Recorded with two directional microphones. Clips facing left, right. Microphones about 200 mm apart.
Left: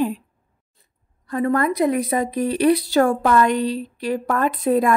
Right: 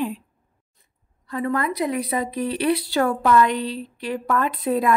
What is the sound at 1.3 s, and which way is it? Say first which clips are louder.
A woman's voice: left 4 dB; 45° left (ahead or behind).